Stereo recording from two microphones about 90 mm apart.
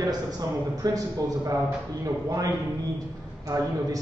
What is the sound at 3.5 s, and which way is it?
Speech, 45° right (ahead or behind).